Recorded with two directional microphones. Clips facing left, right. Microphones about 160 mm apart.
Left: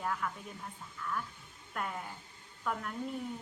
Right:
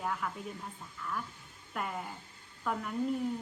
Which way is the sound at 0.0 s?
5° right (ahead or behind).